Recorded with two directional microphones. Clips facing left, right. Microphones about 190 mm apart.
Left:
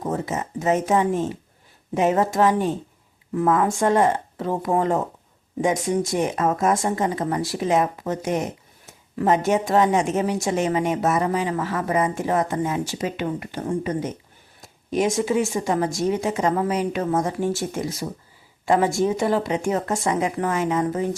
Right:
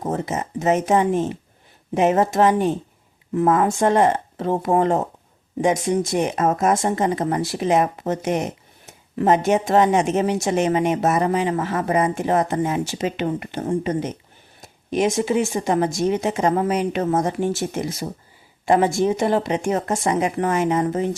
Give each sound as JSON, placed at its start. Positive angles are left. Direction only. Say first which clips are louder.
{"t": 0.0, "sound": "speech", "louder": "right 1 dB", "side_deg": -20}